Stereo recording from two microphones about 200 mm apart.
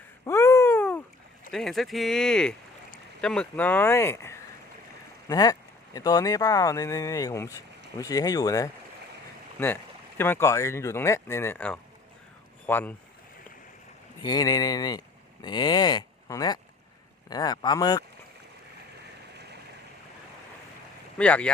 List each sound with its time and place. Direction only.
0.3 s a sound: 15° left (ahead or behind)
1.5 s speech: centre (ahead or behind); by 8.7 s 15° left (ahead or behind)
10.2 s speech: 10° left (ahead or behind)
14.2 s speech: 20° left (ahead or behind)
21.2 s speech: 5° left (ahead or behind)